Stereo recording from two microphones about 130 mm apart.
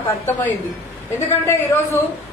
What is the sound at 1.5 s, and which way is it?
Speech, 15° left (ahead or behind).